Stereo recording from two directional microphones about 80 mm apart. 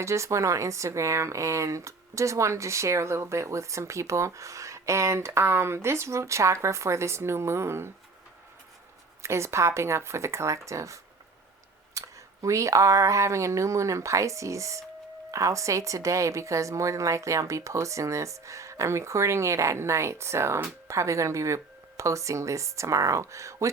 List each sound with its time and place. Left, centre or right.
0.0 s speech: right
9.2 s speech: right